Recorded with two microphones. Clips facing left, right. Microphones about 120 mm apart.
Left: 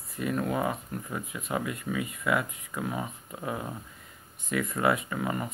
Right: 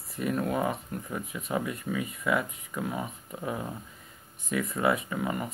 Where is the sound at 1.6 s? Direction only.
30° right (ahead or behind).